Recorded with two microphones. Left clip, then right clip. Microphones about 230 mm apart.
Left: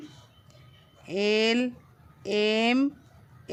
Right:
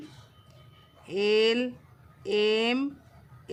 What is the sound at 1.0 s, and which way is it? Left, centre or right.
A man's voice, left.